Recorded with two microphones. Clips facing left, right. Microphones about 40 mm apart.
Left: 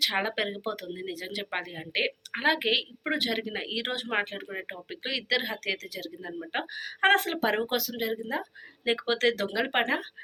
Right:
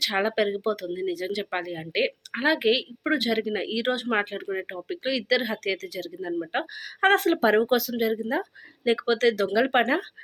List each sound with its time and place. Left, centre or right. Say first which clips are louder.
0.0 s speech: right 3 dB; centre
0.3 s speech: right 6 dB; left
1.2 s a woman's voice: right 5 dB; centre
3.0 s a woman's voice: right 5 dB; centre
6.7 s speech: right 2 dB; left
7.3 s speech: right 7 dB; centre
8.8 s speech: right 4 dB; left
9.5 s a woman's voice: right 5 dB; centre